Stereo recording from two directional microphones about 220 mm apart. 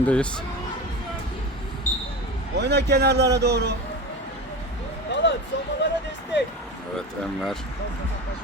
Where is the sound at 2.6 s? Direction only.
50° right (ahead or behind).